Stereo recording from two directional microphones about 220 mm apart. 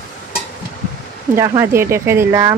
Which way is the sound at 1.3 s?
10° right (ahead or behind).